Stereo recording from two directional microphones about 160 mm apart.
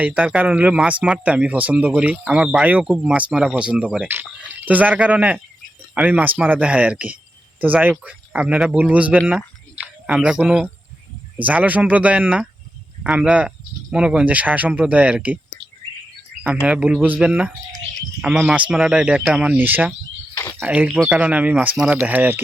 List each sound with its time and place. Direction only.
0.0 s speech: 10° right (ahead or behind)
16.6 s speech: 10° right (ahead or behind)
20.3 s a sound: 15° left (ahead or behind)
20.6 s speech: 10° right (ahead or behind)